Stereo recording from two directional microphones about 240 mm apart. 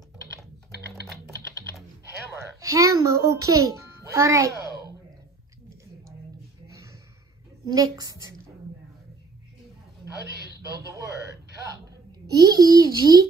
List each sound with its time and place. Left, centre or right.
2.6 s a child's voice: centre
7.6 s a child's voice: centre
10.2 s speech: right
12.3 s a child's voice: centre